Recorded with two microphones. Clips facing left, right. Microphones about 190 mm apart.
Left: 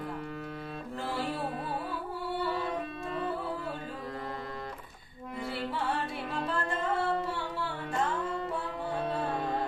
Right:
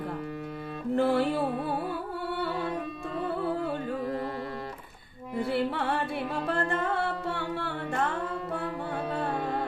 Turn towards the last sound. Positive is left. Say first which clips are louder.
# right 3 dB
turn(degrees=-60)  # may be behind; listen again after turning